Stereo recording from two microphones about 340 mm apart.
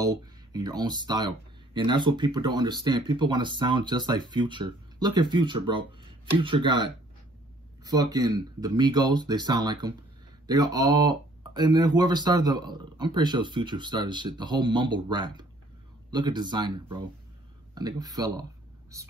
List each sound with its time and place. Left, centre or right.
0.0 s speech: centre